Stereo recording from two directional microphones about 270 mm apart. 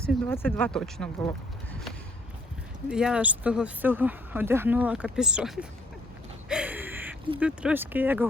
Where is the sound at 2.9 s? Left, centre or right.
Centre.